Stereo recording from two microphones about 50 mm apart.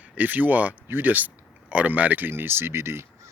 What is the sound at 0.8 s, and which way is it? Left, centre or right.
Speech, right.